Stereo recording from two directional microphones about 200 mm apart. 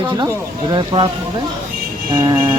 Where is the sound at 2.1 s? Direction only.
20° right (ahead or behind).